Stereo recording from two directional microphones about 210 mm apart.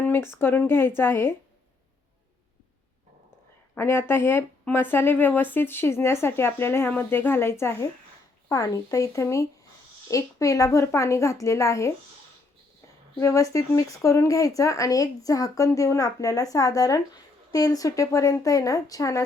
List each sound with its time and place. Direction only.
0.0 s speech: 10° left (ahead or behind)
3.8 s speech: 10° left (ahead or behind)
13.1 s speech: 15° left (ahead or behind)